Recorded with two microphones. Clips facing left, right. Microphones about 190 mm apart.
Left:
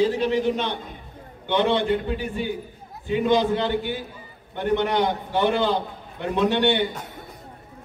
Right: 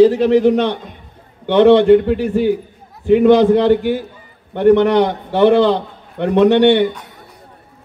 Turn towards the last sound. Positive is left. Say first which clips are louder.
# right 10 dB
turn(degrees=-70)  # may be behind; listen again after turning